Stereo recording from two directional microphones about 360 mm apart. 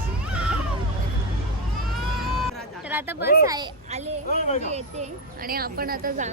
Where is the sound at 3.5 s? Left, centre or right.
Centre.